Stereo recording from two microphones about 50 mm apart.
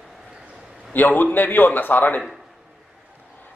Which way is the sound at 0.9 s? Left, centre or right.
Left.